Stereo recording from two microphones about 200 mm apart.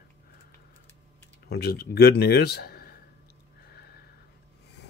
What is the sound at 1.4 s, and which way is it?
Speech, 50° left (ahead or behind).